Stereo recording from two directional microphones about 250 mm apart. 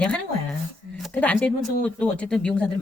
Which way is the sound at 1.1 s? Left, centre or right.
Centre.